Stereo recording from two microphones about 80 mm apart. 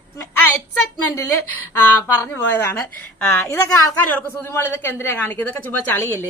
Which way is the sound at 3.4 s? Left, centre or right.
Left.